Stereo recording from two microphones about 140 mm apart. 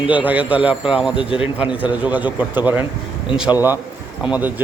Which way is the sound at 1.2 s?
40° left (ahead or behind).